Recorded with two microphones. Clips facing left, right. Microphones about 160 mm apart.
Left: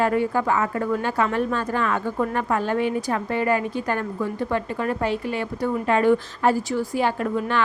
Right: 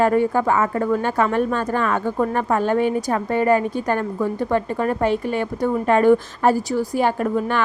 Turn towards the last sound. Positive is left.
turn(degrees=-50)  # may be behind; listen again after turning